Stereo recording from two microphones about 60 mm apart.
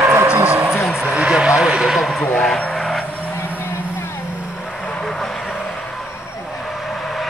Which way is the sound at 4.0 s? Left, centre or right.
Left.